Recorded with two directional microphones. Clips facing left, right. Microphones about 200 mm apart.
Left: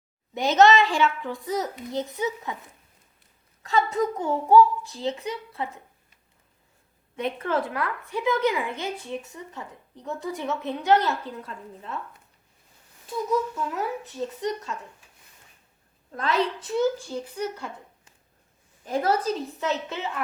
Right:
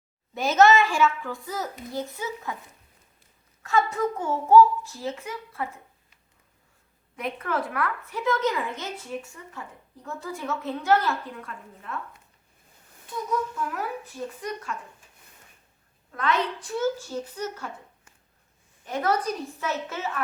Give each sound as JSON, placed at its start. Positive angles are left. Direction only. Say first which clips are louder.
{"t": 0.3, "sound": "a woman's voice", "louder": "left 1 dB", "side_deg": 20}
{"t": 3.6, "sound": "a child's voice", "louder": "left 1 dB", "side_deg": 20}
{"t": 7.2, "sound": "a woman's voice", "louder": "left 3 dB", "side_deg": 25}
{"t": 8.1, "sound": "a child's voice", "louder": "left 2 dB", "side_deg": 15}
{"t": 13.7, "sound": "a woman's voice", "louder": "left 2 dB", "side_deg": 25}
{"t": 16.1, "sound": "a child's voice", "louder": "left 1 dB", "side_deg": 30}
{"t": 18.9, "sound": "a woman's voice", "louder": "left 2 dB", "side_deg": 30}